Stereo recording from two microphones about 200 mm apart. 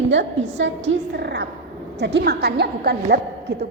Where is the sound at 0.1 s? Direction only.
65° right (ahead or behind).